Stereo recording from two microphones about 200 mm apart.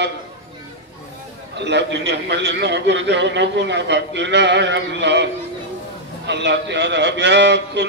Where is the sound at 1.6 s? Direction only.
60° right (ahead or behind).